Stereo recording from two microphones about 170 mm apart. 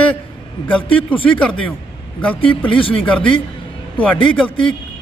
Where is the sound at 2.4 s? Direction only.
30° left (ahead or behind).